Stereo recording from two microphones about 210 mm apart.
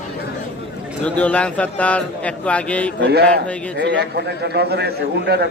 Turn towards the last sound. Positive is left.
turn(degrees=-50)  # may be behind; listen again after turning